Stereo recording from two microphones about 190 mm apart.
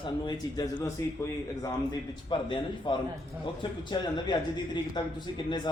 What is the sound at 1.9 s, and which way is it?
A man's voice, 25° left (ahead or behind).